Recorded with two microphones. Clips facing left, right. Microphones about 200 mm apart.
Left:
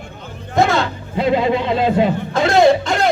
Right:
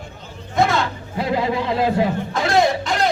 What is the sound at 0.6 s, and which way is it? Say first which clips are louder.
Speech: left 2 dB; 25° left (ahead or behind).